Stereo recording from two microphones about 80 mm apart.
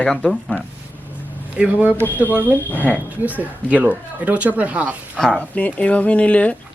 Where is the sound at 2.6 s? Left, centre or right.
Left.